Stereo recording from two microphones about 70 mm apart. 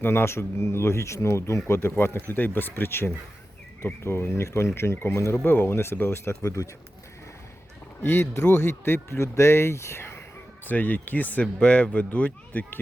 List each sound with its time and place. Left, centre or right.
0.0 s speech: left
8.0 s speech: left
10.7 s speech: left